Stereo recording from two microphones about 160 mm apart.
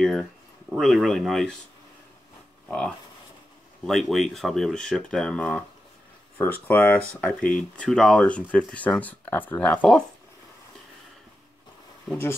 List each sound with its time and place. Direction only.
0.7 s speech: centre (ahead or behind)
3.8 s speech: centre (ahead or behind)
12.1 s speech: 15° left (ahead or behind)